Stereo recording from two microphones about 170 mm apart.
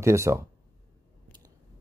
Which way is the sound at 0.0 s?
15° right (ahead or behind).